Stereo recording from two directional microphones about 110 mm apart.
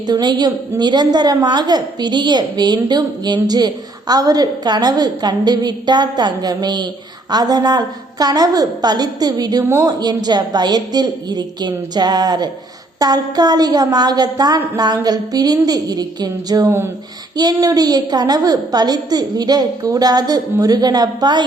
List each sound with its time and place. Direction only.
0.1 s a woman's voice: 40° right (ahead or behind)
9.6 s speech: 25° right (ahead or behind)
10.0 s a woman's voice: 40° right (ahead or behind)